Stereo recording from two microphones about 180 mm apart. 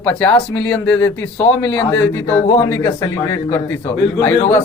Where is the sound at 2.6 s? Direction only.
20° left (ahead or behind).